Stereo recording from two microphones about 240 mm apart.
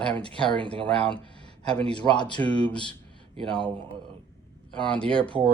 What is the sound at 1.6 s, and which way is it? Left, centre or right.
Speech, centre.